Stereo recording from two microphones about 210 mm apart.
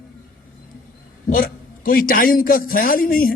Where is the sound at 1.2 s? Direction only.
40° left (ahead or behind).